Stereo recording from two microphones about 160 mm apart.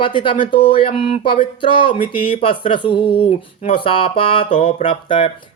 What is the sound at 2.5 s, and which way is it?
Speech, 30° left (ahead or behind).